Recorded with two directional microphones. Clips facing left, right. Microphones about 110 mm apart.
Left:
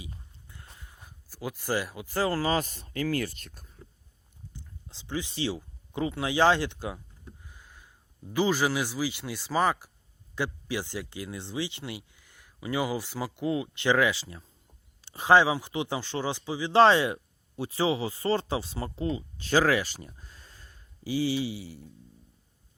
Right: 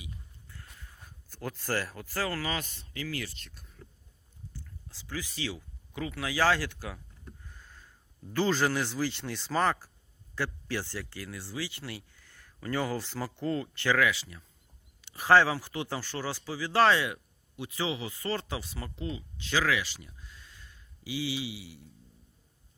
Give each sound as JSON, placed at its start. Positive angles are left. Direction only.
{"t": 0.4, "sound": "a sound", "side_deg": 20}
{"t": 0.8, "sound": "speech", "side_deg": 15}
{"t": 4.5, "sound": "speech", "side_deg": 20}
{"t": 7.4, "sound": "speech", "side_deg": 10}